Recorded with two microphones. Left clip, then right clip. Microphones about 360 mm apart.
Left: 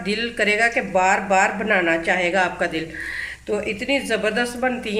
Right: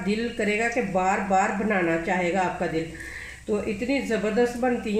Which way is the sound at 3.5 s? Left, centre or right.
Left.